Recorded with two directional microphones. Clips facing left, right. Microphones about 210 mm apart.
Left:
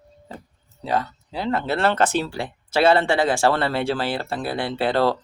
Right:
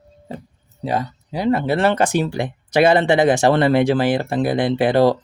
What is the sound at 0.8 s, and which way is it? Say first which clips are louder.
Speech: right 2 dB; 15° right (ahead or behind).